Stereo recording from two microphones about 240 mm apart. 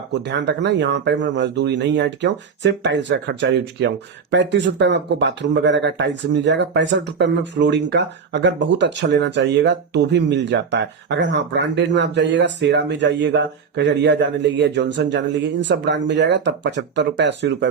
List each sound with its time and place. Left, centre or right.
0.1 s speech: right